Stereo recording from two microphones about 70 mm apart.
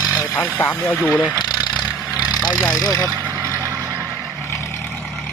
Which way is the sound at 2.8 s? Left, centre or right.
Left.